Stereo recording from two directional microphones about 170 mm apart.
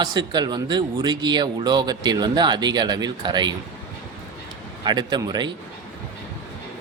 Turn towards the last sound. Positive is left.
turn(degrees=-25)  # may be behind; listen again after turning